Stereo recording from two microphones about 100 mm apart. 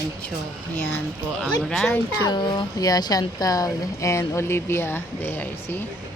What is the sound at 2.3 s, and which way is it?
Speech, 50° left (ahead or behind).